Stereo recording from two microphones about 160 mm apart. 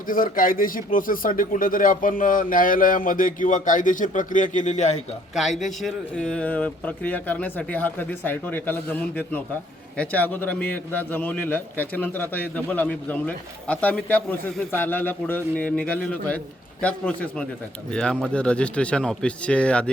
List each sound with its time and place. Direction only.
0.1 s speech: 60° left (ahead or behind)
5.3 s a man's voice: centre (ahead or behind)